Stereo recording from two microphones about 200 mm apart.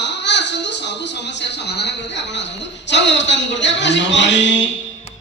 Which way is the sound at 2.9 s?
60° left (ahead or behind).